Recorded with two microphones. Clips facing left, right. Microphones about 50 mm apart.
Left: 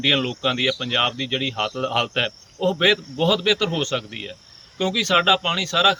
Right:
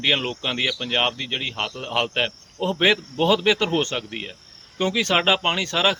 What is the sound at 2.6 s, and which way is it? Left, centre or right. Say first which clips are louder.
Speech: left 1 dB; right.